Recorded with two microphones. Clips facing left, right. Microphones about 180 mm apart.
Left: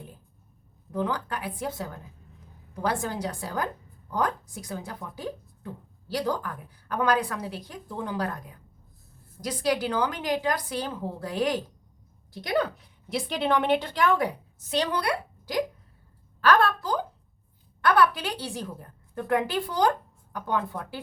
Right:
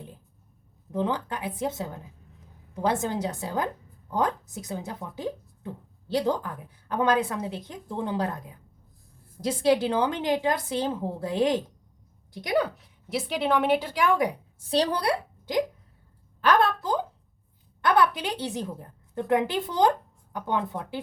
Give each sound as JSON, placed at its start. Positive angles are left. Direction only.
{"t": 0.9, "sound": "a woman's voice", "side_deg": -20}
{"t": 13.1, "sound": "a woman's voice", "side_deg": -5}
{"t": 14.6, "sound": "speech", "side_deg": -35}
{"t": 15.5, "sound": "speech", "side_deg": -25}